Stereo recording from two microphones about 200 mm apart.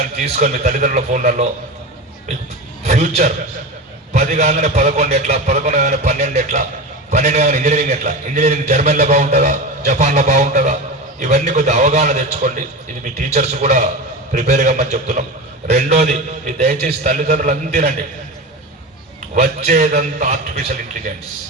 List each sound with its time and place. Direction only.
0.2 s a man's voice: 40° right (ahead or behind)
2.8 s a man's voice: 35° right (ahead or behind)
19.4 s a man's voice: 40° right (ahead or behind)